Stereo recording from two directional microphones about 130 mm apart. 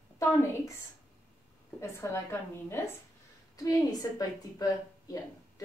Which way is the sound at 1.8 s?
20° left (ahead or behind).